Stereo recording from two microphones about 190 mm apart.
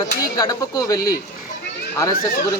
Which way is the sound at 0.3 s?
20° left (ahead or behind).